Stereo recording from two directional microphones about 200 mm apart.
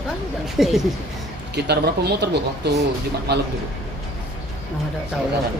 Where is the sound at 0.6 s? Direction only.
Centre (ahead or behind).